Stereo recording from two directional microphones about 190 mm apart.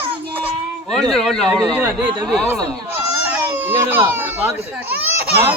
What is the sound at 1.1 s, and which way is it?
Speech, centre (ahead or behind).